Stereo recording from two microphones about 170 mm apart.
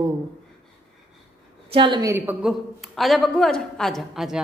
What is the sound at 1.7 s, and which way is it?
Speech, 30° right (ahead or behind).